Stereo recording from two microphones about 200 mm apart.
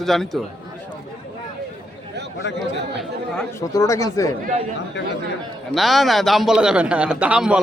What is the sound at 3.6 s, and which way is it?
Speech, 15° left (ahead or behind).